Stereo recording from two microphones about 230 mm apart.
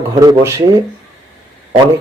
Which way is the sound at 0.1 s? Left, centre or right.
Centre.